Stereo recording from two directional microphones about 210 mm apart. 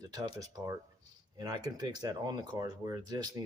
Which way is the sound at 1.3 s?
20° right (ahead or behind).